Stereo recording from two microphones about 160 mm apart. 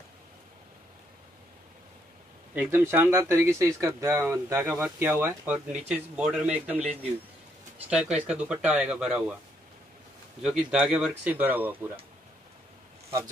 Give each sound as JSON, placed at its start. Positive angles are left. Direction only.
{"t": 2.5, "sound": "speech", "side_deg": -10}
{"t": 7.9, "sound": "speech", "side_deg": -5}
{"t": 10.4, "sound": "speech", "side_deg": -5}